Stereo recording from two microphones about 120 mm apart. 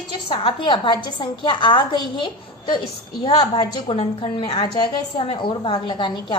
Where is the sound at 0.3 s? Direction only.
45° left (ahead or behind).